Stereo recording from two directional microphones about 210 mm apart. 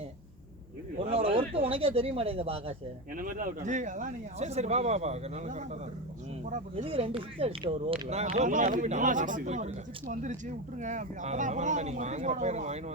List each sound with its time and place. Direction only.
0.9 s speech: 25° right (ahead or behind)
3.2 s speech: 40° right (ahead or behind)